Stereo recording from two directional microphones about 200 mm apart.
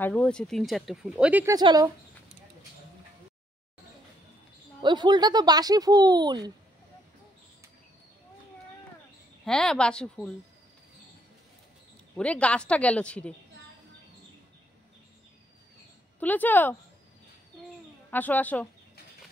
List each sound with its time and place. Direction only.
0.0 s speech: 5° left (ahead or behind); by 1.9 s 20° right (ahead or behind)
4.8 s speech: 20° right (ahead or behind)
9.4 s speech: 5° left (ahead or behind)
12.2 s a woman's voice: 5° left (ahead or behind)
16.2 s a woman's voice: 10° left (ahead or behind)
18.1 s a woman's voice: 10° left (ahead or behind)